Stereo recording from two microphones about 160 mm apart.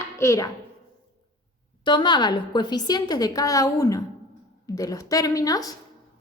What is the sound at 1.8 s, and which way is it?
A woman's voice, 30° left (ahead or behind).